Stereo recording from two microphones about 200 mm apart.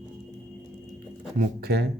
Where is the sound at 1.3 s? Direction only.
50° right (ahead or behind).